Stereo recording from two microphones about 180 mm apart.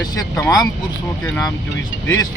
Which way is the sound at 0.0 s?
20° left (ahead or behind).